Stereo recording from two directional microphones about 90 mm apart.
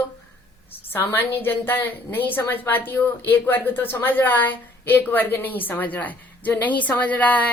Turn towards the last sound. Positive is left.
turn(degrees=15)  # may be behind; listen again after turning